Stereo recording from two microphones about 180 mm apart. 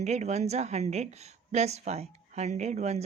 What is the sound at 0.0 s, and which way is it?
A woman's voice, 40° right (ahead or behind).